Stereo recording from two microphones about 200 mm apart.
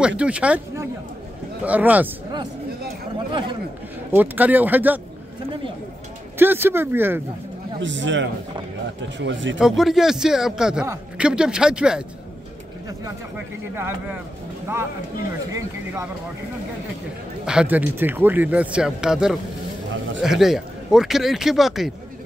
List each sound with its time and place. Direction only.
0.2 s speech: 5° right (ahead or behind)
3.3 s a man's voice: 25° right (ahead or behind)
4.1 s speech: 10° right (ahead or behind)
6.3 s speech: 10° right (ahead or behind)
7.8 s a man's voice: 65° right (ahead or behind)
9.6 s speech: centre (ahead or behind)
13.7 s speech: 10° right (ahead or behind)
15.5 s speech: 15° right (ahead or behind)
17.5 s speech: 5° right (ahead or behind)